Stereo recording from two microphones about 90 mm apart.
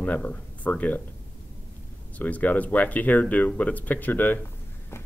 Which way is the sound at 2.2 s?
15° left (ahead or behind).